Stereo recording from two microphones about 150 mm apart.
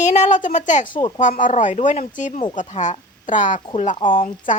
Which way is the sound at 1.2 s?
60° left (ahead or behind).